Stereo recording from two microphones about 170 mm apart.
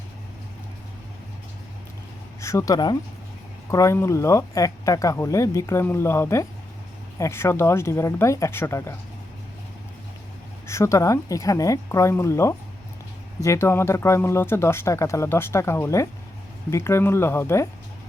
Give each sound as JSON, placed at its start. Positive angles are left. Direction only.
{"t": 2.4, "sound": "speech", "side_deg": 15}
{"t": 10.7, "sound": "speech", "side_deg": 15}